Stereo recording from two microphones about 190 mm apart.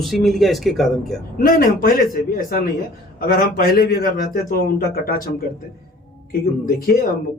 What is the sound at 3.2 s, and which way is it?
A man's voice, 50° left (ahead or behind).